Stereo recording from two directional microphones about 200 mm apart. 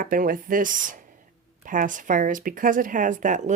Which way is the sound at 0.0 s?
45° right (ahead or behind).